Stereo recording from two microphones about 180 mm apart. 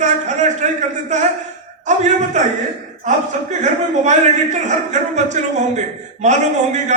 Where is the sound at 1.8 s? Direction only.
40° right (ahead or behind).